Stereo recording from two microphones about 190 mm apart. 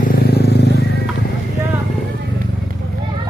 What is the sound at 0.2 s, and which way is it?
Vehicle, 60° left (ahead or behind).